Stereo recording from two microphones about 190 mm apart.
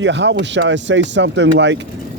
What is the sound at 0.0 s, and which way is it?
Speech, 70° right (ahead or behind).